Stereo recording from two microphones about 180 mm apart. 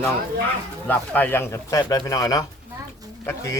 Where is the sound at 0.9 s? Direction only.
10° left (ahead or behind).